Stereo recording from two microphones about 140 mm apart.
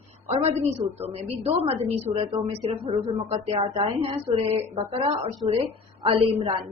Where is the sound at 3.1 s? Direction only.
55° right (ahead or behind).